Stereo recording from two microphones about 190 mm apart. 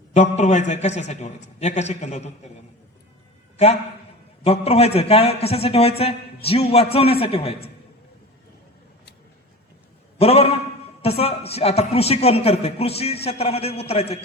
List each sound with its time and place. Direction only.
0.1 s a man's voice: 35° left (ahead or behind)
4.4 s a man's voice: 35° left (ahead or behind)
10.2 s a man's voice: 35° left (ahead or behind)